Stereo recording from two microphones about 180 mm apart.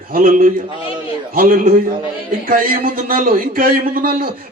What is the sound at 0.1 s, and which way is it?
A man's voice, 50° right (ahead or behind).